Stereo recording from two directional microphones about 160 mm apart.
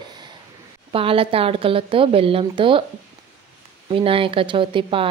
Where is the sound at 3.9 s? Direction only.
35° right (ahead or behind).